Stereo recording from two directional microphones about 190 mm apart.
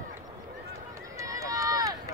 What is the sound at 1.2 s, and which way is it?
Run, 15° right (ahead or behind).